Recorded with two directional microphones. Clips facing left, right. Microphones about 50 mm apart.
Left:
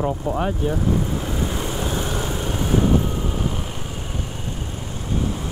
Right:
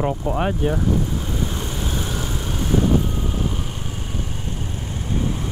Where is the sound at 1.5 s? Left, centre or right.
Centre.